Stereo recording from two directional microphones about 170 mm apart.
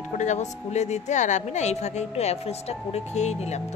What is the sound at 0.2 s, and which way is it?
A woman's voice, 45° left (ahead or behind).